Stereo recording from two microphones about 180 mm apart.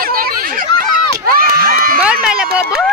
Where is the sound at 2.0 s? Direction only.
5° right (ahead or behind).